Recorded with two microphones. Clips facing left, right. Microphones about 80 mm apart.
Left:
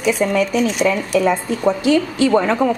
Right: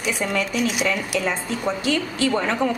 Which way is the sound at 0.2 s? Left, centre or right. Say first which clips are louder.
Left 6 dB; centre.